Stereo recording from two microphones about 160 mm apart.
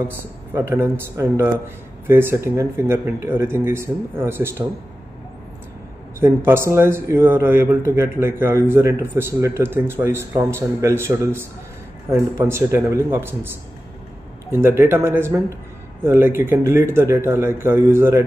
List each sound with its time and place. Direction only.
0.5 s speech: 15° right (ahead or behind)
6.1 s speech: 15° right (ahead or behind)
14.6 s speech: 15° right (ahead or behind)